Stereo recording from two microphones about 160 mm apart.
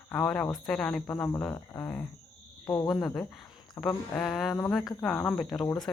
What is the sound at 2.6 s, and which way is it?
Speech, 25° left (ahead or behind).